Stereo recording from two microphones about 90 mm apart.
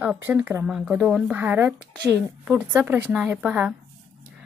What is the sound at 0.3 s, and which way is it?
Speech, 25° right (ahead or behind).